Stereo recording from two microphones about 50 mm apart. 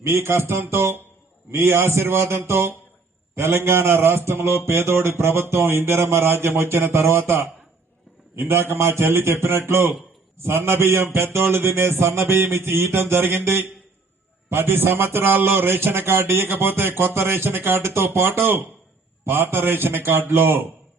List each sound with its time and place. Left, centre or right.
0.0 s a man's voice: right
12.4 s a man's voice: right